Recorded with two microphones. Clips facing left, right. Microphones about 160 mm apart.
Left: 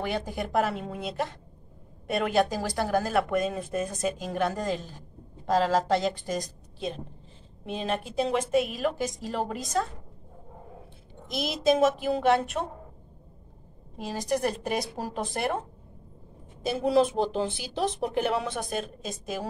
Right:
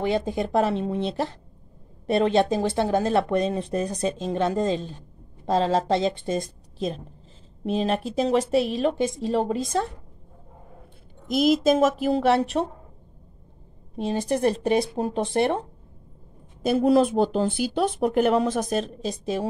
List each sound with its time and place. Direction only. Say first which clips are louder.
0.0 s speech: right 6 dB; 20° right (ahead or behind)
7.6 s a woman's voice: right 6 dB; 35° right (ahead or behind)
11.2 s speech: right 6 dB; 50° right (ahead or behind)
12.6 s a woman's voice: right 6 dB; 35° right (ahead or behind)
13.9 s speech: right 4 dB; 30° right (ahead or behind)
16.6 s speech: right 5 dB; 50° right (ahead or behind); by 19.4 s 30° right (ahead or behind)